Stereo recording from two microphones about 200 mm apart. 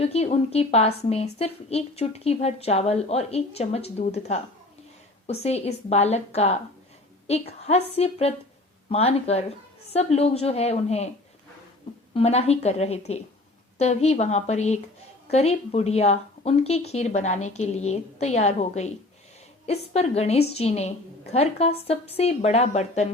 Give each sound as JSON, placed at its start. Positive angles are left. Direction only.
{"t": 0.0, "sound": "a woman's voice", "side_deg": 30}
{"t": 7.6, "sound": "a woman's voice", "side_deg": 30}
{"t": 12.1, "sound": "a woman's voice", "side_deg": 30}